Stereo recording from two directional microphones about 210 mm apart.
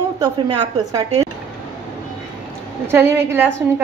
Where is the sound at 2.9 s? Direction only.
10° right (ahead or behind).